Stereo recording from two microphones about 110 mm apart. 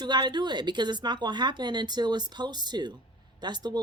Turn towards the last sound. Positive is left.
turn(degrees=-40)  # may be behind; listen again after turning